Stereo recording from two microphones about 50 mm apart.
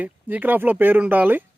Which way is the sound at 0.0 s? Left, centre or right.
Right.